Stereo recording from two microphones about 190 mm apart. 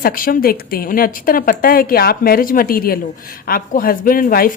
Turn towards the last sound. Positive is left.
turn(degrees=50)  # may be behind; listen again after turning